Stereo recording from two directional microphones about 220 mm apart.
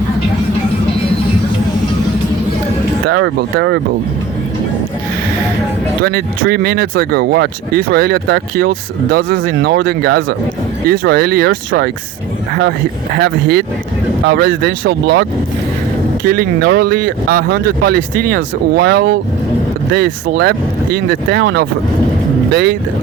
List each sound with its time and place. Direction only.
3.2 s speech: 55° right (ahead or behind)
6.0 s speech: 45° right (ahead or behind)
13.1 s speech: 45° right (ahead or behind)